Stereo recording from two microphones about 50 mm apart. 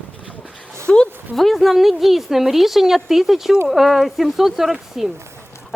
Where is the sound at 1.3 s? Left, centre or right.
Centre.